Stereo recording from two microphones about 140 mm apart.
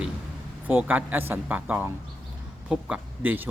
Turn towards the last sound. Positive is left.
turn(degrees=-15)  # may be behind; listen again after turning